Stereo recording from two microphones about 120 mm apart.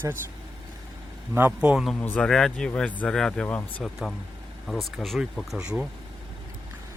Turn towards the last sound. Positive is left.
turn(degrees=-5)  # may be behind; listen again after turning